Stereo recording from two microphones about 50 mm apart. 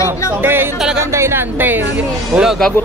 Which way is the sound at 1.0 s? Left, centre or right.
Right.